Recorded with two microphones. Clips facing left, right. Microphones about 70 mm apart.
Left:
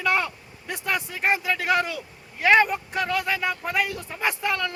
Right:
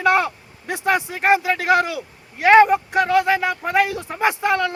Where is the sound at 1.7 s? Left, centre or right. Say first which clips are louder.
Right 6 dB; right.